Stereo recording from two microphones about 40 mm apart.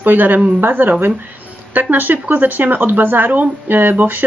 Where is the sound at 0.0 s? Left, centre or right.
Right.